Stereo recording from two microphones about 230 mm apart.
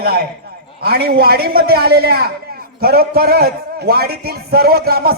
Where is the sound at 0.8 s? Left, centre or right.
Right.